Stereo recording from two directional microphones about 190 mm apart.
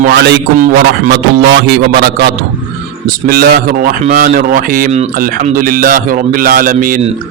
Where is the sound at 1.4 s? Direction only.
65° right (ahead or behind).